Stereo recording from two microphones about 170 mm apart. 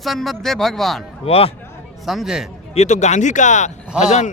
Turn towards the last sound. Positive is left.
turn(degrees=40)  # may be behind; listen again after turning